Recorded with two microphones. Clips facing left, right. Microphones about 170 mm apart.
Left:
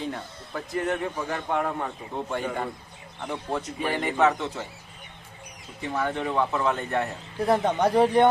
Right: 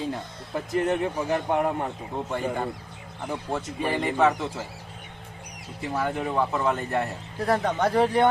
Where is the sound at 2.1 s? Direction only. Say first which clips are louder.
Right 1 dB; centre (ahead or behind).